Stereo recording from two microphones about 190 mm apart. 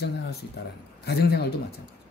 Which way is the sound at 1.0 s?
60° left (ahead or behind).